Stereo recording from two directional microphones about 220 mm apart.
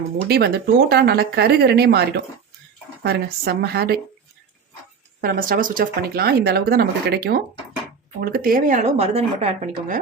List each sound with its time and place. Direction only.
0.3 s speech: 45° right (ahead or behind)
5.2 s speech: 40° right (ahead or behind)